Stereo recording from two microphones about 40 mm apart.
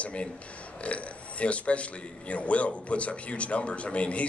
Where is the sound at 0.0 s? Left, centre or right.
Left.